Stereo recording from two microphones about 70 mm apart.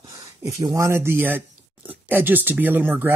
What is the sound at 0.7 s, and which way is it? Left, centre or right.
Speech, right.